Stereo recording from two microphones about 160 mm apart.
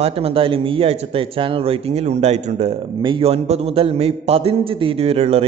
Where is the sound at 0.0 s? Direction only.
40° right (ahead or behind).